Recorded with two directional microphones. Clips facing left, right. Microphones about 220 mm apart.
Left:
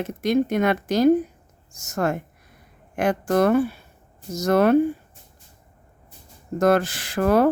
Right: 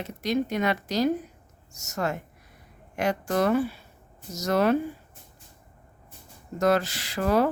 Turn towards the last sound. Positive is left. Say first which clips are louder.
# left 5 dB
turn(degrees=55)  # may be behind; listen again after turning